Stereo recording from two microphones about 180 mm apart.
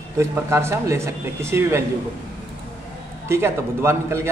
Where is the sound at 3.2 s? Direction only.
15° right (ahead or behind).